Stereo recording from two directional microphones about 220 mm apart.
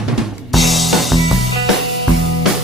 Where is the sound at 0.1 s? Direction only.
Centre (ahead or behind).